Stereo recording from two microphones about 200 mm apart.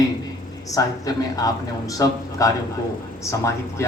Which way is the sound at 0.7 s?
15° left (ahead or behind).